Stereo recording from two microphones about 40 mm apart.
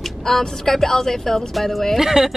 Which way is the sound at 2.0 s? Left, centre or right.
Centre.